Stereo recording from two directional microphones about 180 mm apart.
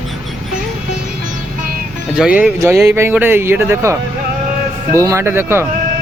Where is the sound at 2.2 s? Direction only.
5° right (ahead or behind).